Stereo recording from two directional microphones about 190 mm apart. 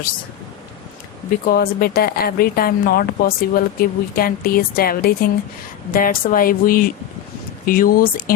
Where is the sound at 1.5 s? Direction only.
55° left (ahead or behind).